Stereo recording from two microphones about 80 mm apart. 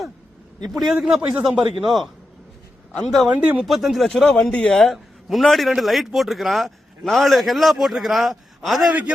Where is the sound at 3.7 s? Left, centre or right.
Centre.